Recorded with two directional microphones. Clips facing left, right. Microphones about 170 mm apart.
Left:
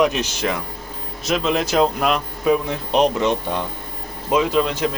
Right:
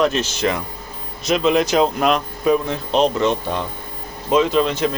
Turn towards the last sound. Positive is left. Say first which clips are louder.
# right 2 dB
turn(degrees=5)  # may be behind; listen again after turning